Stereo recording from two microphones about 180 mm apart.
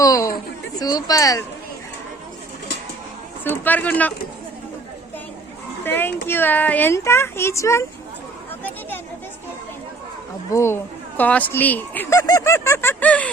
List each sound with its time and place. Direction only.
0.0 s a sound: 20° left (ahead or behind)
0.8 s speech: 20° left (ahead or behind)
3.4 s speech: 10° left (ahead or behind)
5.8 s speech: 10° left (ahead or behind)
10.5 s speech: 15° left (ahead or behind)